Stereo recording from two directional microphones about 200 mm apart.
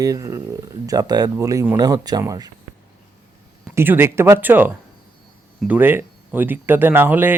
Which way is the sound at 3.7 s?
10° right (ahead or behind).